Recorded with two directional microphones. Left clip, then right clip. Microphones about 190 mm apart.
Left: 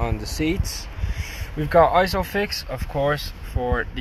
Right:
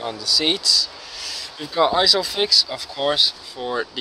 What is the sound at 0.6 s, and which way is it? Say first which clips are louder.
Speech: right 17 dB; 35° right (ahead or behind).